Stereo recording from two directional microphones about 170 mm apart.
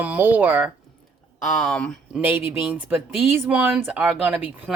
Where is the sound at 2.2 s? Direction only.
10° right (ahead or behind).